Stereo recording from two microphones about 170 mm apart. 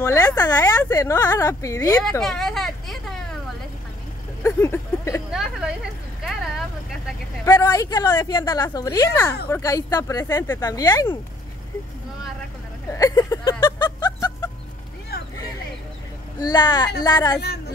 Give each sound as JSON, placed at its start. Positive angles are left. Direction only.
{"t": 0.0, "sound": "speech", "side_deg": 15}
{"t": 2.2, "sound": "vehicle", "side_deg": 0}
{"t": 4.4, "sound": "speech", "side_deg": 15}
{"t": 5.3, "sound": "a woman's voice", "side_deg": -5}
{"t": 6.2, "sound": "vehicle", "side_deg": 0}
{"t": 7.4, "sound": "a woman's voice", "side_deg": 15}
{"t": 12.9, "sound": "a sound", "side_deg": 20}
{"t": 16.3, "sound": "a woman's voice", "side_deg": 25}